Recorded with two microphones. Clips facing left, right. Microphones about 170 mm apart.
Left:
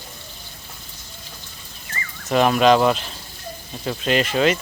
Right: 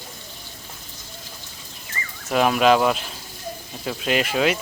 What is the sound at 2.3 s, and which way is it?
Speech, 5° right (ahead or behind).